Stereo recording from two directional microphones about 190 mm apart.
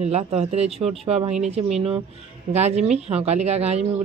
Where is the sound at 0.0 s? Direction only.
35° right (ahead or behind).